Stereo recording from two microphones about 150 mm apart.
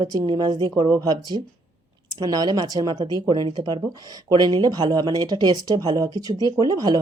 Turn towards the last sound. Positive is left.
turn(degrees=-25)  # may be behind; listen again after turning